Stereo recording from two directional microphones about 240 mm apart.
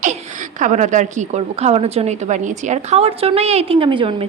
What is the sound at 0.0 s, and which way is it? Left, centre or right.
A woman's voice, right.